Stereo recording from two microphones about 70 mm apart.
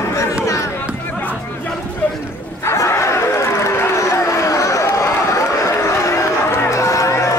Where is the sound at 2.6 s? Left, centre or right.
Left.